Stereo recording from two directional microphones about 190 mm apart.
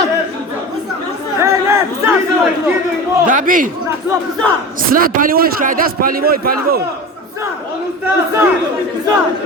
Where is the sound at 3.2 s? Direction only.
45° right (ahead or behind).